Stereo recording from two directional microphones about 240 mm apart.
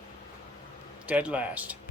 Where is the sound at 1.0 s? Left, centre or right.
Centre.